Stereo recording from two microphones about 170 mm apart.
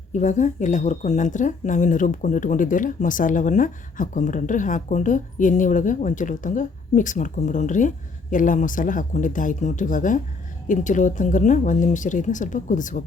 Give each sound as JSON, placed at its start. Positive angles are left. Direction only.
{"t": 0.1, "sound": "speech", "side_deg": 45}